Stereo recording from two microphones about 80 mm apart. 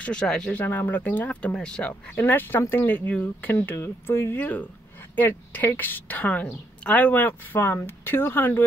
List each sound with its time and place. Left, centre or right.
0.0 s speech: centre
2.1 s a woman's voice: left